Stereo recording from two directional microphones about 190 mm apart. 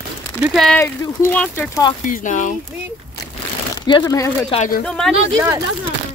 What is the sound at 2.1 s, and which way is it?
Speech, 45° left (ahead or behind).